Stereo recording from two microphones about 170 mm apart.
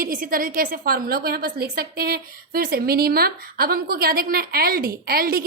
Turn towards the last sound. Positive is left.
turn(degrees=-60)  # may be behind; listen again after turning